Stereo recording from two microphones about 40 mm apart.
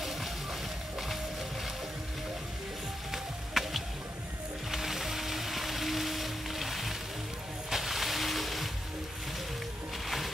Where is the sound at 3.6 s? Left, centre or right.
Centre.